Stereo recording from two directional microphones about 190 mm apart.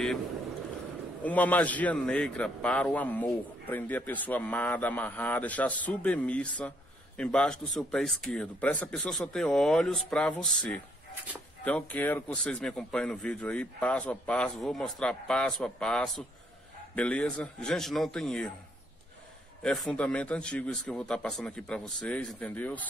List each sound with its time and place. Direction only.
1.2 s a man's voice: 10° left (ahead or behind)
19.6 s a man's voice: 5° left (ahead or behind)